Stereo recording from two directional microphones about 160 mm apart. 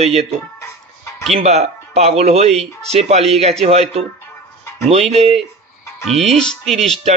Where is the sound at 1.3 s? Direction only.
40° right (ahead or behind).